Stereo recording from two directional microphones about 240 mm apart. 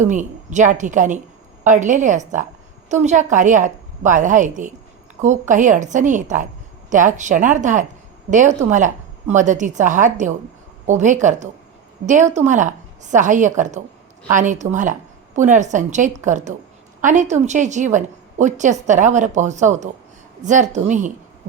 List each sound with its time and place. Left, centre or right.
0.0 s a woman's voice: right